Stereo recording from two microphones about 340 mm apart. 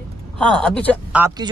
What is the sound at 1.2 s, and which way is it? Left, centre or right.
Speech, centre.